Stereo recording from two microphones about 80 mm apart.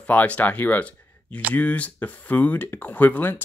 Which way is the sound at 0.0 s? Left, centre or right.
Centre.